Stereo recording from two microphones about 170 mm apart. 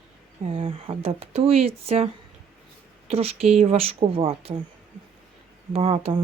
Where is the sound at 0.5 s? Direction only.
35° right (ahead or behind).